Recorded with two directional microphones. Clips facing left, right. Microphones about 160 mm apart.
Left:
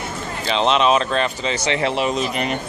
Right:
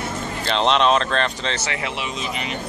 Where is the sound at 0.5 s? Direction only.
5° left (ahead or behind).